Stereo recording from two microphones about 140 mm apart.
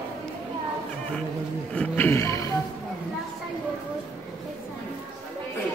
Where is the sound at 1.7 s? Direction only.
15° left (ahead or behind).